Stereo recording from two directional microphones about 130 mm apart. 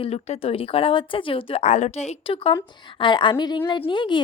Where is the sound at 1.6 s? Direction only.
60° left (ahead or behind).